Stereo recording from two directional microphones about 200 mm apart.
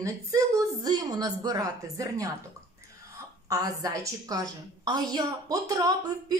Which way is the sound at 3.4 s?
20° right (ahead or behind).